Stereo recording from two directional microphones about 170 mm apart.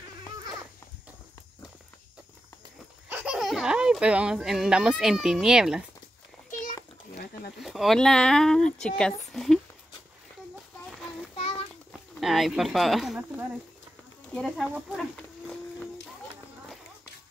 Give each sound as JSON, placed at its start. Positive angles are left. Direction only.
{"t": 3.1, "sound": "speech", "side_deg": -10}
{"t": 7.5, "sound": "speech", "side_deg": 0}
{"t": 11.3, "sound": "a sound", "side_deg": 35}
{"t": 12.2, "sound": "speech", "side_deg": 0}